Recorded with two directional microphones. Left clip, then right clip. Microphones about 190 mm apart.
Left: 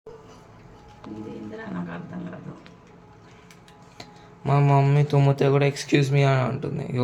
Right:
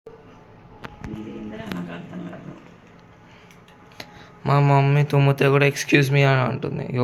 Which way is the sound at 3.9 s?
5° left (ahead or behind).